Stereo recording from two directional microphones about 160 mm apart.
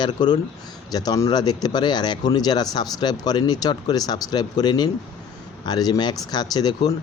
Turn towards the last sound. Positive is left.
turn(degrees=25)  # may be behind; listen again after turning